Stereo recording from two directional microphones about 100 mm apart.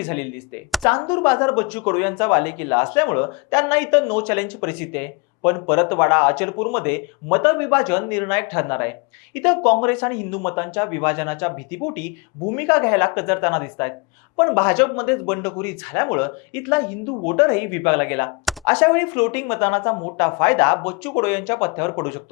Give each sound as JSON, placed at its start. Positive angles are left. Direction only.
{"t": 0.0, "sound": "speech", "side_deg": 15}